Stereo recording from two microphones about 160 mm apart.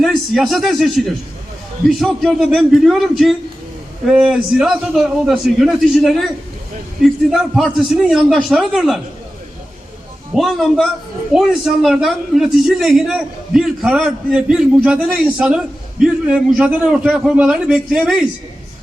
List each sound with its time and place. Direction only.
0.0 s a man's voice: centre (ahead or behind)
10.3 s a man's voice: centre (ahead or behind)